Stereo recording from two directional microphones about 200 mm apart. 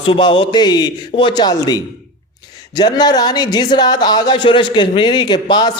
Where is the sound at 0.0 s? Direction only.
25° left (ahead or behind).